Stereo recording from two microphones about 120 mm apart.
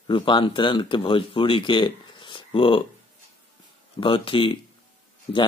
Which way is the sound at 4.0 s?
45° left (ahead or behind).